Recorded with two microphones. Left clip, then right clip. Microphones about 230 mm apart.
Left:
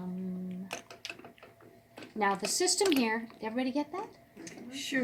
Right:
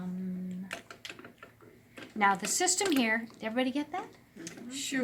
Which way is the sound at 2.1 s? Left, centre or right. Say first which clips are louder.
Right 3 dB; centre.